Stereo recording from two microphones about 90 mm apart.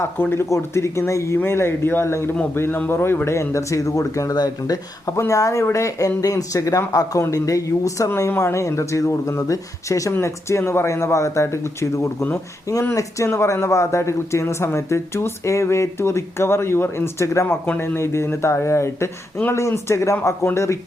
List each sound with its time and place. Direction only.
0.0 s speech: 25° left (ahead or behind)